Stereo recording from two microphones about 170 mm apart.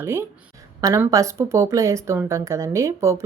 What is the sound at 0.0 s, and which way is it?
Speech, 15° right (ahead or behind).